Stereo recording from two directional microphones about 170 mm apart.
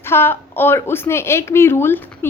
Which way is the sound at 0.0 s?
15° left (ahead or behind).